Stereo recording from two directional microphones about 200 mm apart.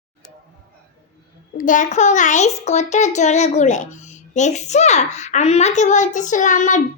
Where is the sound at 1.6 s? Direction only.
40° left (ahead or behind).